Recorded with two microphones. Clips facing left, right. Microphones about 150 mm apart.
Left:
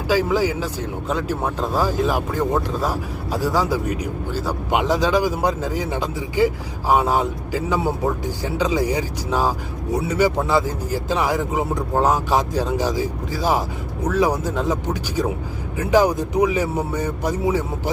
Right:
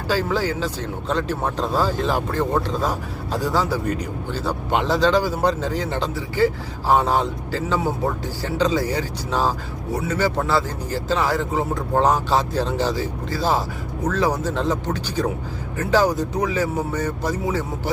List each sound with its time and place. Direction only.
0.1 s speech: 10° left (ahead or behind)